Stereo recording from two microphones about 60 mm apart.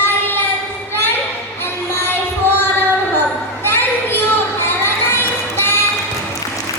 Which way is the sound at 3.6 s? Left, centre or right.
Left.